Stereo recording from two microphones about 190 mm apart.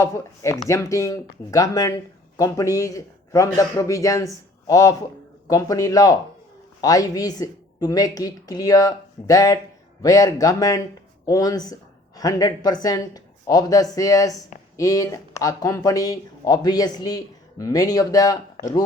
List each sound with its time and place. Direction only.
0.0 s speech: 15° left (ahead or behind)